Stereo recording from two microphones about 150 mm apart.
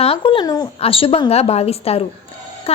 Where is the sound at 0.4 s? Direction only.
25° left (ahead or behind).